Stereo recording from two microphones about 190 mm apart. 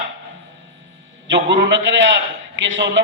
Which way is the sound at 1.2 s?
70° right (ahead or behind).